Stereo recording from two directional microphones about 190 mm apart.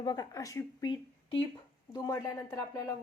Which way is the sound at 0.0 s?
20° left (ahead or behind).